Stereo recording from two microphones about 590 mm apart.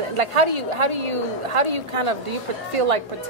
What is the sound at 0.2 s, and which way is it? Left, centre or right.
A woman's voice, right.